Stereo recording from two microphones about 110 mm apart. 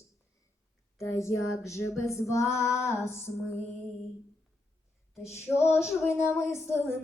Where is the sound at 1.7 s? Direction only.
25° left (ahead or behind).